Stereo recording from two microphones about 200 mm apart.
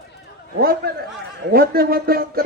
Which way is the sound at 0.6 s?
50° right (ahead or behind).